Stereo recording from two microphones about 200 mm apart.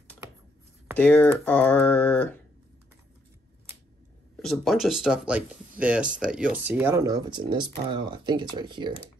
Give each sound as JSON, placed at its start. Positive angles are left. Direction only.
{"t": 0.9, "sound": "speech", "side_deg": 10}
{"t": 4.4, "sound": "speech", "side_deg": 0}